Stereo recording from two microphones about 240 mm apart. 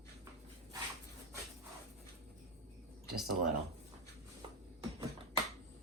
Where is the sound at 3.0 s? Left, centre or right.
Centre.